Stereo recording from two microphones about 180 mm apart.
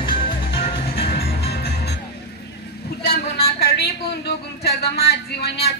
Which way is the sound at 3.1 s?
60° left (ahead or behind).